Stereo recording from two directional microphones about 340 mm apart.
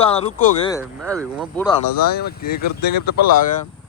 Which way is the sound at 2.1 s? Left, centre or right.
Left.